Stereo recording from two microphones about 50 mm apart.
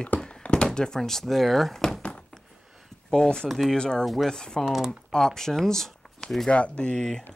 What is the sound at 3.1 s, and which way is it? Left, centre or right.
Speech, centre.